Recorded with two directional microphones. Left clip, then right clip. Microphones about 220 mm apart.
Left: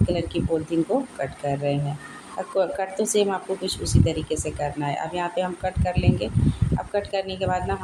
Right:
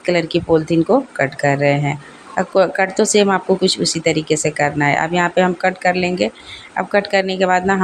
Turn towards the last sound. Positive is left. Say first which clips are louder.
# right 10 dB
turn(degrees=-20)  # may be behind; listen again after turning